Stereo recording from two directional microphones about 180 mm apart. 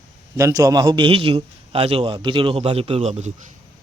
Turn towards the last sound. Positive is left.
turn(degrees=-40)  # may be behind; listen again after turning